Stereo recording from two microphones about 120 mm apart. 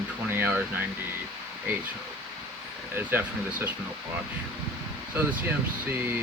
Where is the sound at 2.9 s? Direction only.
15° right (ahead or behind).